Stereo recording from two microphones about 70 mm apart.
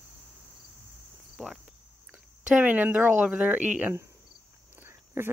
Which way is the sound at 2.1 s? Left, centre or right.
Right.